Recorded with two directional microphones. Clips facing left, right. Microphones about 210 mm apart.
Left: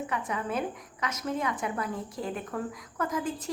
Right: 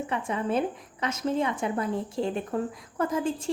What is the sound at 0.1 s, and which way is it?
A woman's voice, 30° right (ahead or behind).